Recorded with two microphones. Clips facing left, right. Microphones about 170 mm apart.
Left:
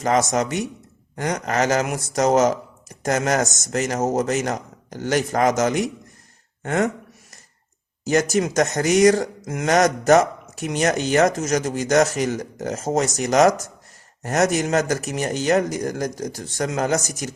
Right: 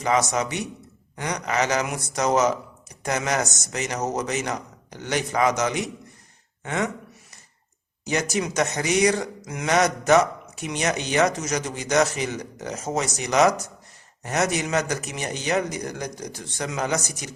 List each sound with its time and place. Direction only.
0.0 s speech: 45° left (ahead or behind)
8.1 s speech: 45° left (ahead or behind)